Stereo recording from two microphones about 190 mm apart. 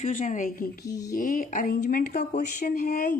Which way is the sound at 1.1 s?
45° left (ahead or behind).